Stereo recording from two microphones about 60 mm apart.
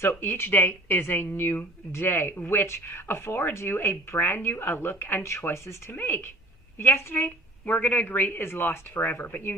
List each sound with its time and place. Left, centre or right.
0.0 s a woman's voice: left